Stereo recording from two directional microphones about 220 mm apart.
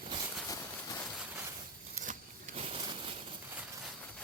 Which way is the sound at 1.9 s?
30° right (ahead or behind).